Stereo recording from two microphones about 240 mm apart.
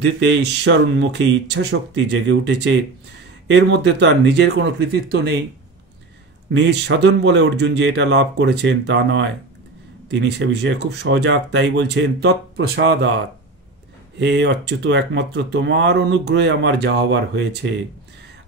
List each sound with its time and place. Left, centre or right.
0.0 s speech: right
6.5 s speech: right
14.1 s speech: right